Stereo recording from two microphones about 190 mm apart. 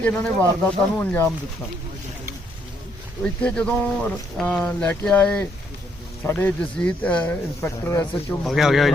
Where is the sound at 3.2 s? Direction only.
5° left (ahead or behind).